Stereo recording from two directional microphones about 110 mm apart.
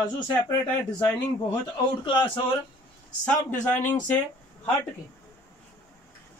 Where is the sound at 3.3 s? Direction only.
15° left (ahead or behind).